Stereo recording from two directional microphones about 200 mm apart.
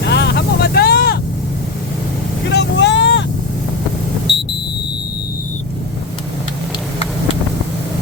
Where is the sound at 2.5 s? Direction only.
60° left (ahead or behind).